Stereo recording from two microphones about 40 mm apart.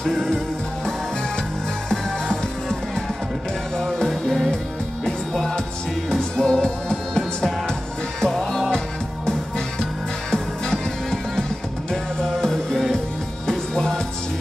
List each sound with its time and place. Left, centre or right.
0.0 s music: centre
1.9 s music: centre
4.1 s music: centre
8.7 s music: centre